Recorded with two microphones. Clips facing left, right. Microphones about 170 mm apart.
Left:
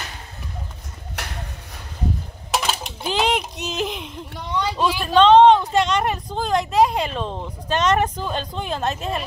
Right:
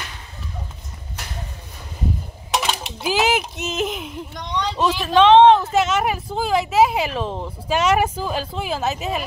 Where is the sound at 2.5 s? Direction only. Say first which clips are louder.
Right 1 dB; centre (ahead or behind).